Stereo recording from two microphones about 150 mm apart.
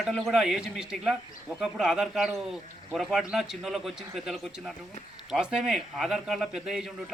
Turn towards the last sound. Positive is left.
turn(degrees=0)  # may be behind; listen again after turning